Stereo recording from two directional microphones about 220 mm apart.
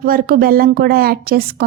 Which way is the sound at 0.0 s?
40° right (ahead or behind).